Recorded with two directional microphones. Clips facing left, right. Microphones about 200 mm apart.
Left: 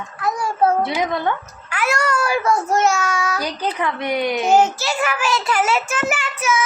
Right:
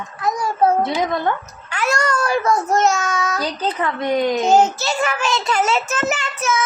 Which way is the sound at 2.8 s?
10° left (ahead or behind).